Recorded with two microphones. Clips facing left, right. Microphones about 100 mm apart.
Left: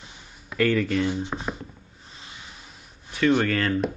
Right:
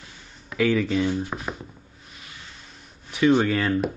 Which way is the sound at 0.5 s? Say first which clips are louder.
Right 1 dB; centre (ahead or behind).